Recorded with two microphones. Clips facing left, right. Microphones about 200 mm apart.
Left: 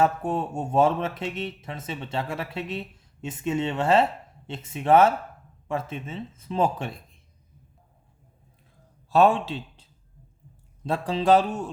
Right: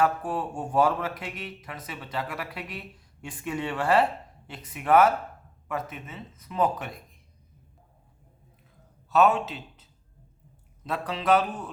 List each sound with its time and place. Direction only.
0.0 s speech: 25° left (ahead or behind)
9.0 s a man's voice: 30° left (ahead or behind)